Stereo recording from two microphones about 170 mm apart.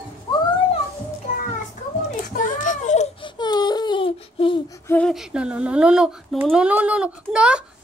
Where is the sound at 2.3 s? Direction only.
50° left (ahead or behind).